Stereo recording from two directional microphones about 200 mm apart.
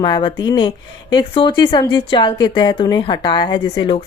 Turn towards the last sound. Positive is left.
turn(degrees=25)  # may be behind; listen again after turning